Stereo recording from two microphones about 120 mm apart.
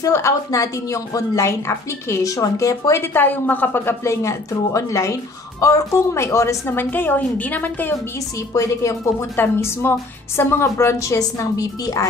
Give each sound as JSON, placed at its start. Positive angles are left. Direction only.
{"t": 0.0, "sound": "a woman's voice", "side_deg": 25}
{"t": 8.5, "sound": "a woman's voice", "side_deg": 25}